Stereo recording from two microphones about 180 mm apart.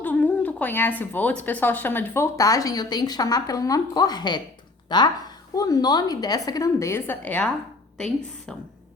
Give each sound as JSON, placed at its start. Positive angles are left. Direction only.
{"t": 0.0, "sound": "a woman's voice", "side_deg": 10}